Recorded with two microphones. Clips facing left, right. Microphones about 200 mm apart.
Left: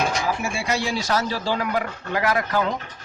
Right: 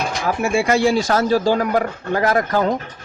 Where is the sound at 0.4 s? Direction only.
50° right (ahead or behind).